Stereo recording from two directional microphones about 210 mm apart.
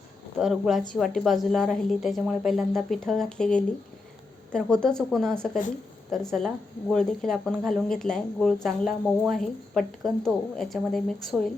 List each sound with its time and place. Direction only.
0.3 s speech: centre (ahead or behind)